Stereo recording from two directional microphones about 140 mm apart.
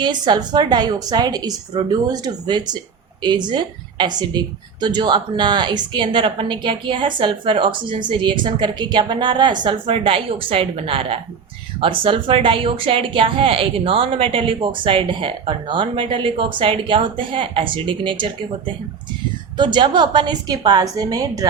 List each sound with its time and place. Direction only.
0.0 s a woman's voice: 35° right (ahead or behind)
19.5 s a woman's voice: 35° right (ahead or behind)